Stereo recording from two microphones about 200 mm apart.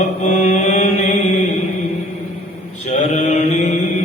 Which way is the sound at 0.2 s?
35° left (ahead or behind).